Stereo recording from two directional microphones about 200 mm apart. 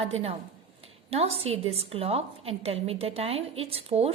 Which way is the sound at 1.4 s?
30° right (ahead or behind).